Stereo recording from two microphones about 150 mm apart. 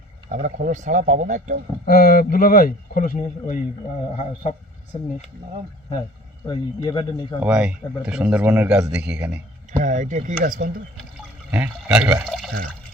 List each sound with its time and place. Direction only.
0.3 s a man's voice: 60° right (ahead or behind)
1.9 s speech: 80° left; by 3.6 s 60° left (ahead or behind)
6.5 s speech: 30° left (ahead or behind)
7.4 s speech: 5° right (ahead or behind)
9.7 s a man's voice: 55° right (ahead or behind)
11.5 s speech: 5° right (ahead or behind)